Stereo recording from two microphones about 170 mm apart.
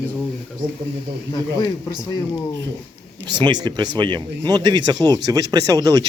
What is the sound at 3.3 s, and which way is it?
Speech, 25° right (ahead or behind).